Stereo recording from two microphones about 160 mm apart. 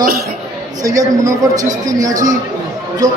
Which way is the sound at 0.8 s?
20° right (ahead or behind).